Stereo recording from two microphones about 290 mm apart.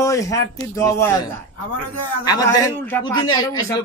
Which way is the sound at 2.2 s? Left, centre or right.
Centre.